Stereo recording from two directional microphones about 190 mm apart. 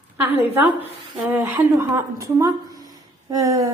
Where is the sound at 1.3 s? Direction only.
15° right (ahead or behind).